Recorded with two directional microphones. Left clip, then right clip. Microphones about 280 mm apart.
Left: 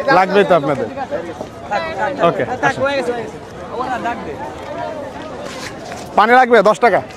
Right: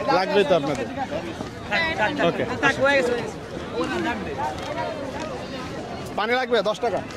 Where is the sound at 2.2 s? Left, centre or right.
Left.